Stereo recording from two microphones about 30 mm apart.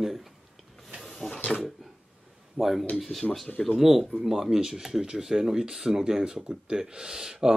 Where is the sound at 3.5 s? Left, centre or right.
Centre.